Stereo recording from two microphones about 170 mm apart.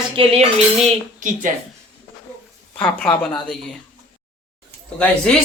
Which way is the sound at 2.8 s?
5° left (ahead or behind).